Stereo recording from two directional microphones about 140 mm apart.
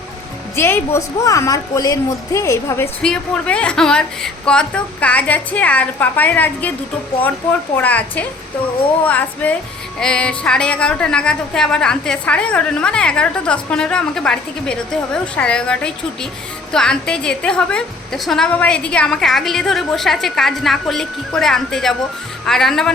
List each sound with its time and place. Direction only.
0.5 s a woman's voice: 15° left (ahead or behind)
3.0 s a woman's voice: 5° left (ahead or behind)
7.8 s a woman's voice: 10° left (ahead or behind)